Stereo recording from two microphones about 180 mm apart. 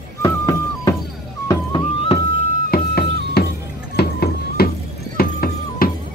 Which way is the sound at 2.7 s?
55° left (ahead or behind).